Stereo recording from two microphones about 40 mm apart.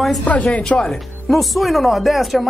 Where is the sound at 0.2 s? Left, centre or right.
Left.